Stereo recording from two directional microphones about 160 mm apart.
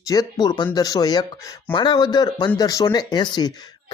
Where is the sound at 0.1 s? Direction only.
25° left (ahead or behind).